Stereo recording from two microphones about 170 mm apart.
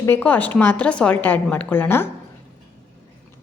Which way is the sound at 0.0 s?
10° left (ahead or behind).